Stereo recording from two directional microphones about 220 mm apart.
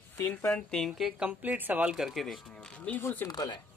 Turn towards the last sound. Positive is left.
turn(degrees=15)  # may be behind; listen again after turning